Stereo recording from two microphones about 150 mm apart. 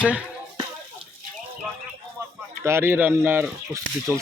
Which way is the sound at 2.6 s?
15° right (ahead or behind).